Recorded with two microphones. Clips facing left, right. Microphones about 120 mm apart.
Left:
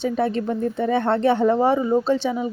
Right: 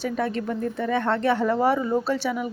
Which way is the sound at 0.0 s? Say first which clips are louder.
Left 4 dB; 30° left (ahead or behind).